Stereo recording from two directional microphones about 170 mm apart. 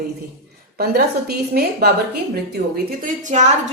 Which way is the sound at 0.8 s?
65° right (ahead or behind).